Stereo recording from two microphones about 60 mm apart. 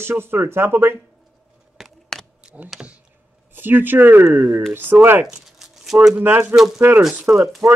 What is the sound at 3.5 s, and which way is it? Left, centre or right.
Speech, right.